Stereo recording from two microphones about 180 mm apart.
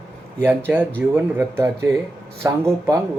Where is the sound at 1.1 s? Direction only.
10° right (ahead or behind).